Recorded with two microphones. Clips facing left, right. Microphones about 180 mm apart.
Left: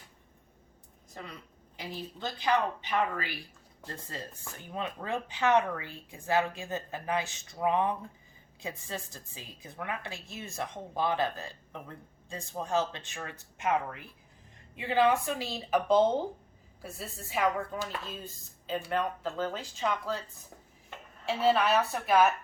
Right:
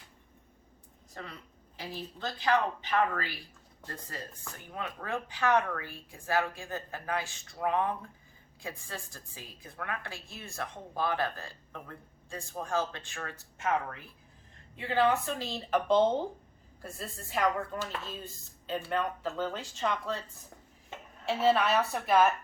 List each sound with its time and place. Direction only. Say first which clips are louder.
1.7 s a woman's voice: left 1 dB; 15° left (ahead or behind)
4.7 s a woman's voice: left 2 dB; 20° left (ahead or behind); by 20.2 s 5° left (ahead or behind)
21.2 s speech: even; centre (ahead or behind)